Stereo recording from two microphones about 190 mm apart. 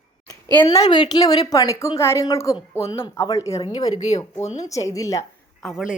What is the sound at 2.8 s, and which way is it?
Speech, 30° left (ahead or behind).